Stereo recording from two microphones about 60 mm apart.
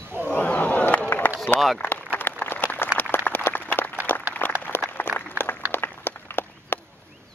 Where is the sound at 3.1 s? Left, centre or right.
Left.